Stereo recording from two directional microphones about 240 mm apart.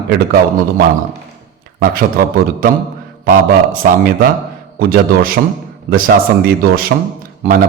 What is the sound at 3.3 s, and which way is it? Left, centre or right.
A man's voice, right.